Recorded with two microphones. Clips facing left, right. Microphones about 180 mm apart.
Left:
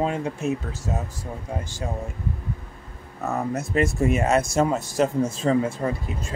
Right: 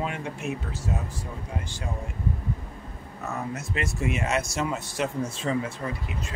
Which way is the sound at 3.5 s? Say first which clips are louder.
Left 8 dB; 40° left (ahead or behind).